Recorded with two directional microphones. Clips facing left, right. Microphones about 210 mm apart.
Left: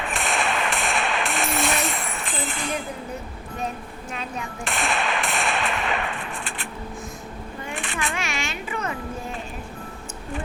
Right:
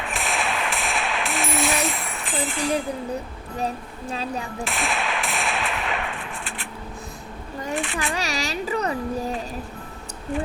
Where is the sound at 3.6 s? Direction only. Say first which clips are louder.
Right 3 dB; 35° right (ahead or behind).